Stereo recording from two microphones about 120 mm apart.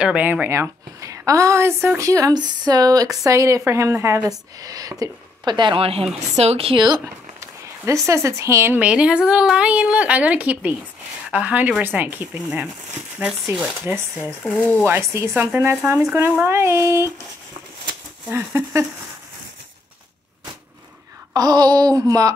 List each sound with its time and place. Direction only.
0.0 s a woman's voice: 10° right (ahead or behind); by 6.8 s 55° right (ahead or behind)
7.3 s speech: 25° right (ahead or behind)
8.7 s a woman's voice: 10° right (ahead or behind)
18.3 s a woman's voice: 20° right (ahead or behind)
21.3 s speech: 30° right (ahead or behind)